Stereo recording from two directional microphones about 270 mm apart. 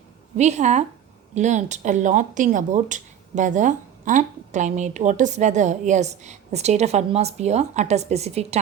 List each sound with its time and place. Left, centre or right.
0.3 s speech: right